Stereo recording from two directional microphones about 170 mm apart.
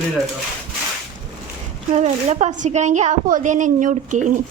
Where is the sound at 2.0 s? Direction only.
45° right (ahead or behind).